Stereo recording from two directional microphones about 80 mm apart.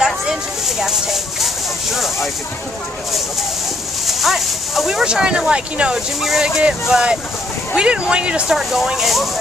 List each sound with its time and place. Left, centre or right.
0.0 s speech: centre
4.1 s speech: centre